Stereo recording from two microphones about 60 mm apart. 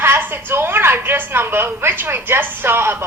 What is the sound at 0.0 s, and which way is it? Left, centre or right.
A woman's voice, right.